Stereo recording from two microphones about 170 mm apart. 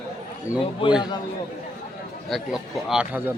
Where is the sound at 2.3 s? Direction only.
Centre (ahead or behind).